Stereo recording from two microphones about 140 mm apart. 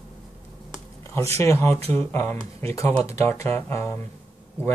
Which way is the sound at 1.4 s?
20° left (ahead or behind).